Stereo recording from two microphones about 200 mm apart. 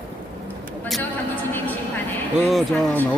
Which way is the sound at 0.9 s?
10° left (ahead or behind).